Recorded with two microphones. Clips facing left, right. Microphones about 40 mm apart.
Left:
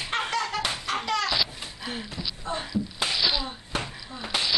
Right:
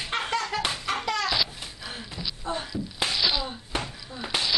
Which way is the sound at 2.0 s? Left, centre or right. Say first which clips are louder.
Left 1 dB; centre.